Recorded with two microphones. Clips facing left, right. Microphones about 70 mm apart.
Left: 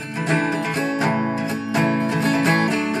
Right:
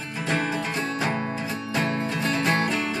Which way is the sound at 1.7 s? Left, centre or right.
Left.